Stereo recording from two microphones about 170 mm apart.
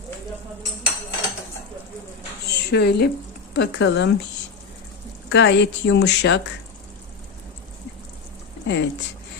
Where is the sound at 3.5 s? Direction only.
90° left.